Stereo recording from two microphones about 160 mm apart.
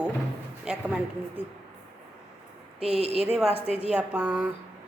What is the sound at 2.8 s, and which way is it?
Speech, 40° right (ahead or behind).